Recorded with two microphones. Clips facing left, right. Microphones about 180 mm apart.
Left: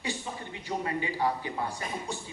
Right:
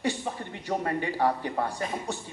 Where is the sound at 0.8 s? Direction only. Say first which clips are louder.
Right 3 dB; 50° right (ahead or behind).